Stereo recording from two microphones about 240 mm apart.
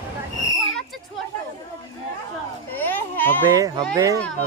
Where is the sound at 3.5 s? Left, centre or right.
Centre.